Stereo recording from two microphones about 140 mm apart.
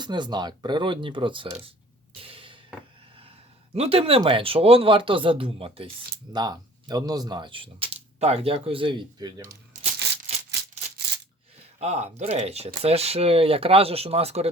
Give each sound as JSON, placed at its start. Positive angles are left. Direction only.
{"t": 0.0, "sound": "speech", "side_deg": -30}
{"t": 2.1, "sound": "music", "side_deg": -40}
{"t": 3.8, "sound": "speech", "side_deg": -45}
{"t": 6.3, "sound": "speech", "side_deg": -30}
{"t": 11.8, "sound": "speech", "side_deg": -55}